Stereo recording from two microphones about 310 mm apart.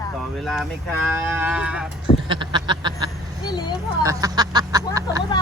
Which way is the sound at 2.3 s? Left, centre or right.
Centre.